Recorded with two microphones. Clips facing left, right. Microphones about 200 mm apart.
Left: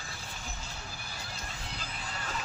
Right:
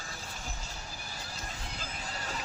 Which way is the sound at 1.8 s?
40° right (ahead or behind).